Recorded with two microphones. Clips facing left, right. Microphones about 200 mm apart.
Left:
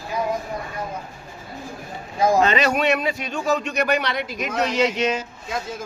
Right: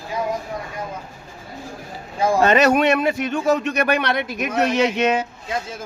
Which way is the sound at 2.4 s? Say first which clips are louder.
Right 4 dB; 50° right (ahead or behind).